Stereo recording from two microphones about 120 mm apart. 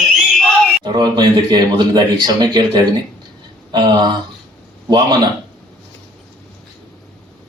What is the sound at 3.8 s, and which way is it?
Speech, 35° right (ahead or behind).